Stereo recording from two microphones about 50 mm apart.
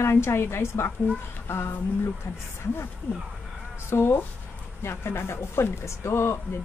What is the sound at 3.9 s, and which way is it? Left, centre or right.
A woman's voice, left.